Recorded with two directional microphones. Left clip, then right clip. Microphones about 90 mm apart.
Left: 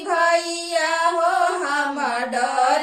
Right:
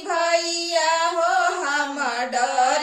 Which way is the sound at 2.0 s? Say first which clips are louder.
Left 1 dB; 25° right (ahead or behind).